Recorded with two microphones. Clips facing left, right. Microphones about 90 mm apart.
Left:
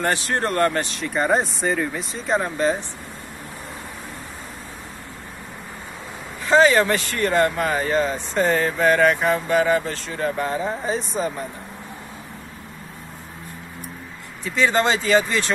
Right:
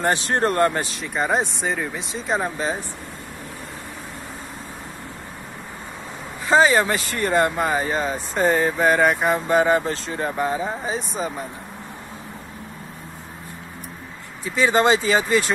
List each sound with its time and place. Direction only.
0.0 s speech: 25° right (ahead or behind)
1.0 s speech: 5° right (ahead or behind)
6.4 s speech: 20° right (ahead or behind)
14.4 s speech: 15° right (ahead or behind)